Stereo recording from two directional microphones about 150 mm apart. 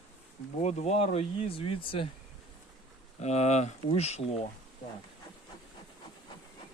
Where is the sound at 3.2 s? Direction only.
50° left (ahead or behind).